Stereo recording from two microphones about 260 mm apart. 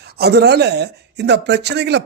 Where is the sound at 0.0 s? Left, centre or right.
Right.